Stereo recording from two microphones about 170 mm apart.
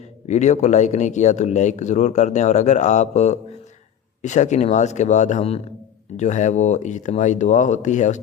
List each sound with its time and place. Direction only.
0.3 s speech: 45° left (ahead or behind)